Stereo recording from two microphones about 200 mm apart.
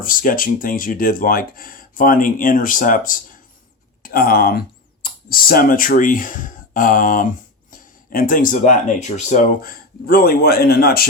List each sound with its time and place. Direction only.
0.0 s speech: 45° left (ahead or behind)